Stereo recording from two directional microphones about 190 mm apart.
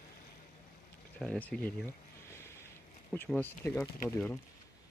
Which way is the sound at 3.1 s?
10° left (ahead or behind).